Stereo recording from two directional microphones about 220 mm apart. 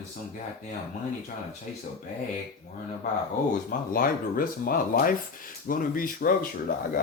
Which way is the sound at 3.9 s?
40° left (ahead or behind).